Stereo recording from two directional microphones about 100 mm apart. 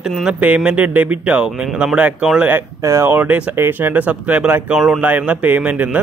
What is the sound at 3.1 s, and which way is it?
Speech, 15° right (ahead or behind).